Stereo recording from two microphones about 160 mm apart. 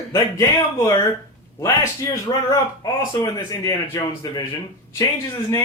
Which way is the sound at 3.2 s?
25° left (ahead or behind).